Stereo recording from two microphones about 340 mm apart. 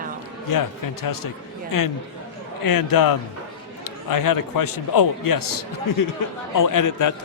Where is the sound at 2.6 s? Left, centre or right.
Left.